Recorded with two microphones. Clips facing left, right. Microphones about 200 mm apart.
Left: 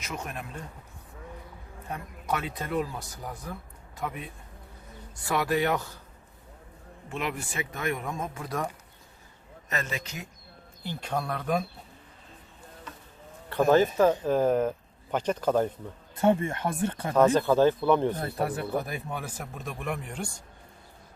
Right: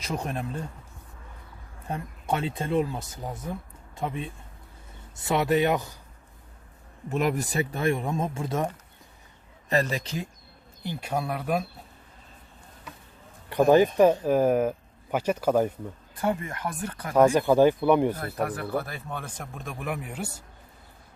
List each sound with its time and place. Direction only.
0.0 s speech: 35° right (ahead or behind)
1.9 s speech: 30° right (ahead or behind)
7.1 s speech: 40° right (ahead or behind); by 8.7 s 25° right (ahead or behind)
9.6 s speech: 35° right (ahead or behind)
10.8 s speech: 10° right (ahead or behind)
13.5 s speech: 15° right (ahead or behind)
16.1 s speech: 25° left (ahead or behind)
17.2 s speech: 10° right (ahead or behind)
18.2 s speech: 25° left (ahead or behind); by 20.4 s 5° right (ahead or behind)